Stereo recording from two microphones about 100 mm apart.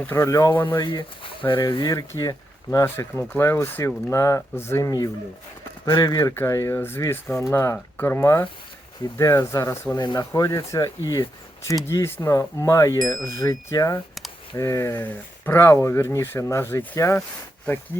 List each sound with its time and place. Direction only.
0.1 s speech: 30° left (ahead or behind)
0.5 s speech: 20° left (ahead or behind)
0.8 s speech: 50° left (ahead or behind)
1.7 s speech: 40° left (ahead or behind)
2.8 s speech: 25° left (ahead or behind)
4.9 s speech: 40° left (ahead or behind)
11.9 s speech: 25° left (ahead or behind)